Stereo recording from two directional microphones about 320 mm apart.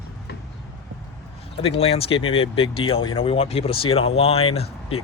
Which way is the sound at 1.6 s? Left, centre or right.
Centre.